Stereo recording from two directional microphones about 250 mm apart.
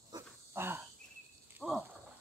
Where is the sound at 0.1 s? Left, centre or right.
Centre.